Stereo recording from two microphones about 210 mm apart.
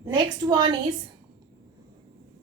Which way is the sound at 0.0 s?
20° right (ahead or behind).